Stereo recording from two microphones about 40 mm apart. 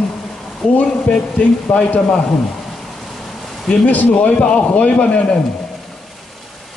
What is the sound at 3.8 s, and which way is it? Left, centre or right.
Speech, left.